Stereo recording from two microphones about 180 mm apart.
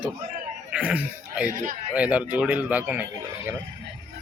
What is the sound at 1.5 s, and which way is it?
Speech, 45° right (ahead or behind).